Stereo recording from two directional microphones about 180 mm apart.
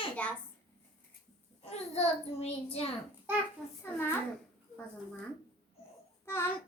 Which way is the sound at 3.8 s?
10° left (ahead or behind).